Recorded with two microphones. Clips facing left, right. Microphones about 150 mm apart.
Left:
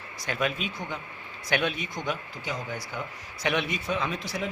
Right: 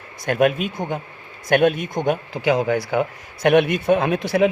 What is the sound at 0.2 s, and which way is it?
Speech, 55° right (ahead or behind).